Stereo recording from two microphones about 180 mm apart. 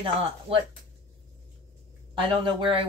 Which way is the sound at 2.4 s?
30° right (ahead or behind).